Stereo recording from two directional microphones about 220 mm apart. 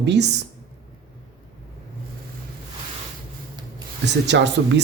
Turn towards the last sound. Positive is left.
turn(degrees=-50)  # may be behind; listen again after turning